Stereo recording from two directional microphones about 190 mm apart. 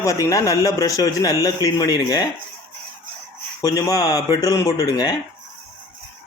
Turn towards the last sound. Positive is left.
turn(degrees=20)  # may be behind; listen again after turning